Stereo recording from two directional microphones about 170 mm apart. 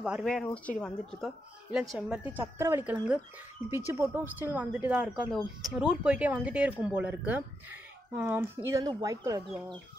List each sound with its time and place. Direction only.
0.0 s a woman's voice: centre (ahead or behind)
1.7 s a woman's voice: 5° right (ahead or behind)